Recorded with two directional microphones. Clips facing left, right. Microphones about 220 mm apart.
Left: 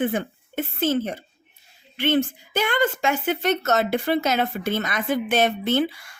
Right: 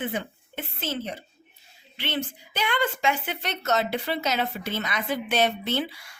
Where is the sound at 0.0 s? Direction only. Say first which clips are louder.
Left 7 dB; 50° left (ahead or behind).